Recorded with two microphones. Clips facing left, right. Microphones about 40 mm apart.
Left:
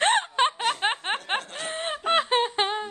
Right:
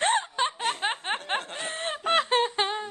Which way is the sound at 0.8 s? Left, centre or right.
Left.